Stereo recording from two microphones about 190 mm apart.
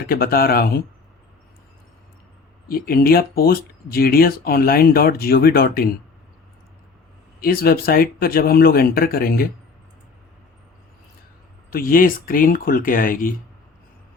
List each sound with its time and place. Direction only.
0.0 s speech: 50° left (ahead or behind)
2.6 s speech: 50° left (ahead or behind)
7.3 s speech: 50° left (ahead or behind)
11.7 s speech: 50° left (ahead or behind)